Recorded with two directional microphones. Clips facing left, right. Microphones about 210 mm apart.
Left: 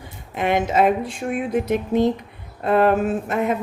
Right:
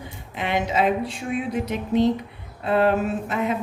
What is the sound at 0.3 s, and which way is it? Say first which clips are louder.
Speech: left 4 dB; 50° left (ahead or behind).